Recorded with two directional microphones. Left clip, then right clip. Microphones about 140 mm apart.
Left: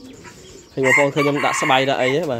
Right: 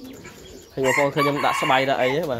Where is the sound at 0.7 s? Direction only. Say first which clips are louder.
Left 4 dB; 45° left (ahead or behind).